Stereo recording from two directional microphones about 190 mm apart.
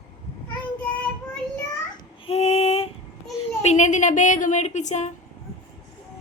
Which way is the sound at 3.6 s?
40° left (ahead or behind).